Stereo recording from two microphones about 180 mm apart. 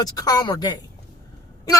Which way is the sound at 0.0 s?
20° left (ahead or behind).